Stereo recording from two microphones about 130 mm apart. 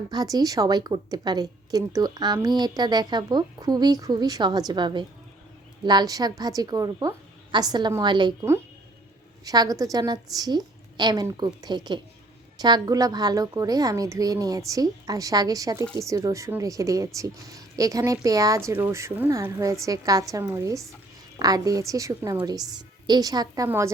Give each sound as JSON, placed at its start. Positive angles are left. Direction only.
{"t": 0.1, "sound": "a woman's voice", "side_deg": -30}
{"t": 8.4, "sound": "a woman's voice", "side_deg": -20}